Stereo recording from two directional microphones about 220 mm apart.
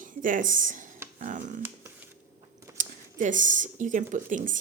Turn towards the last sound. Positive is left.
turn(degrees=-35)  # may be behind; listen again after turning